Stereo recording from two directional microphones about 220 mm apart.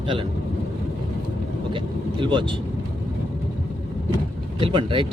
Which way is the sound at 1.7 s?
20° right (ahead or behind).